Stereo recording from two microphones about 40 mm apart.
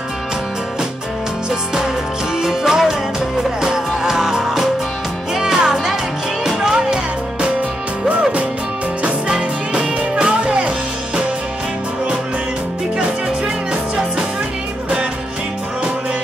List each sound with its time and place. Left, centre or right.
2.4 s music: centre
8.1 s music: right